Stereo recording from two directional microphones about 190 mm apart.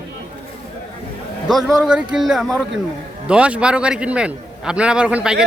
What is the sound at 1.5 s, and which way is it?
Speech, centre (ahead or behind).